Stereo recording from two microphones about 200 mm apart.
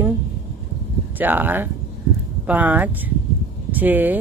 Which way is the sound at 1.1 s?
10° right (ahead or behind).